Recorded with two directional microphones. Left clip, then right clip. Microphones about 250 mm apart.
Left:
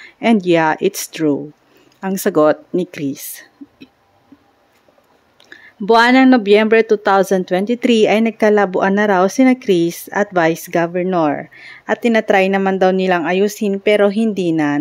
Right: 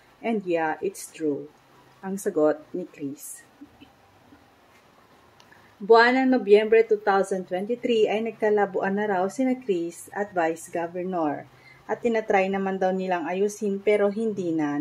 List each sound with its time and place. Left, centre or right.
0.2 s speech: left
5.9 s speech: left